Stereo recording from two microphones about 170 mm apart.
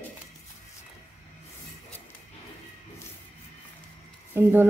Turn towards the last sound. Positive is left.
turn(degrees=-10)  # may be behind; listen again after turning